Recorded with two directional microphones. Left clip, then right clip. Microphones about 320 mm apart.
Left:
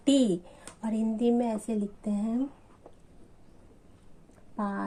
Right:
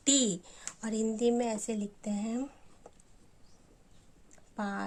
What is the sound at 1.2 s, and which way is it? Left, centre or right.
Speech, right.